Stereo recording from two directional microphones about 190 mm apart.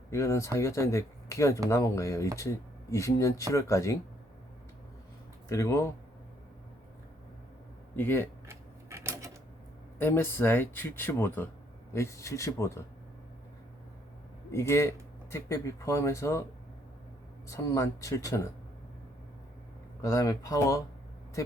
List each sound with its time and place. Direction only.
0.1 s speech: 15° left (ahead or behind)
5.5 s speech: 15° left (ahead or behind)
7.9 s speech: 10° left (ahead or behind)
8.4 s a sound: 15° right (ahead or behind)
10.0 s speech: 10° left (ahead or behind)
14.5 s speech: 15° left (ahead or behind)
17.5 s speech: 15° left (ahead or behind)
20.0 s speech: 15° left (ahead or behind)